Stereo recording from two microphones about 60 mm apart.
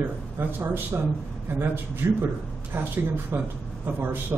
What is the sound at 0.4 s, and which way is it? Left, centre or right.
Speech, right.